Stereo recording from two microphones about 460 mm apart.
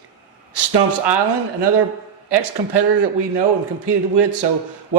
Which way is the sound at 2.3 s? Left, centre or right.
Right.